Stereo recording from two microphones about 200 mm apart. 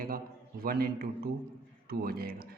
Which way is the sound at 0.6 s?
50° right (ahead or behind).